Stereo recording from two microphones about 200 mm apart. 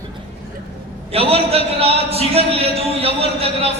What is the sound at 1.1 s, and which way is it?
A man's voice, 30° right (ahead or behind).